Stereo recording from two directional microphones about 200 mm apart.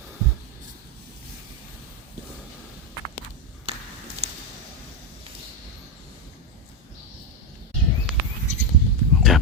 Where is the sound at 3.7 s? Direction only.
30° right (ahead or behind).